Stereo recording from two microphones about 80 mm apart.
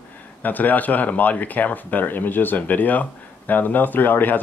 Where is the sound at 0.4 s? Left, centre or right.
Left.